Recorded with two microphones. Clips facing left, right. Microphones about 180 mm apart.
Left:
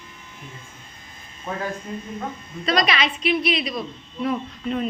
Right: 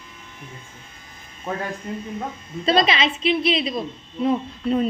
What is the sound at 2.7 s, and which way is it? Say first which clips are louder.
A woman's voice: right 3 dB; 25° right (ahead or behind).